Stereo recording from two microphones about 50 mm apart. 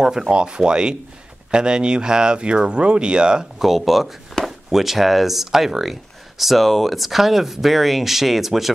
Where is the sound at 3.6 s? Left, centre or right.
Centre.